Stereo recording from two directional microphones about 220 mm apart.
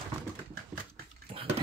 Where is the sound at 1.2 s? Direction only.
25° right (ahead or behind).